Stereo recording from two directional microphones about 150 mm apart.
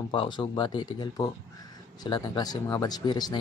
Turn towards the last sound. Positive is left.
turn(degrees=30)  # may be behind; listen again after turning